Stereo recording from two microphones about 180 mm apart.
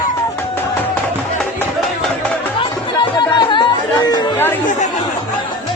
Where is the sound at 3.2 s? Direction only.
25° left (ahead or behind).